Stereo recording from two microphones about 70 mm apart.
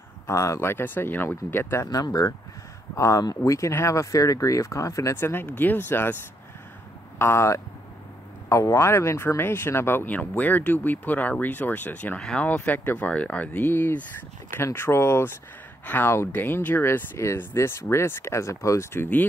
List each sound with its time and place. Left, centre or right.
0.3 s speech: left
1.9 s speech: left
3.0 s speech: left
5.1 s speech: left
7.2 s speech: left
10.0 s speech: left
12.2 s speech: centre
12.4 s speech: left
15.8 s speech: left
17.2 s speech: left